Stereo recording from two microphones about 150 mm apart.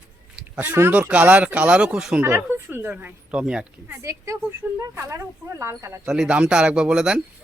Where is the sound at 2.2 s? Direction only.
15° right (ahead or behind).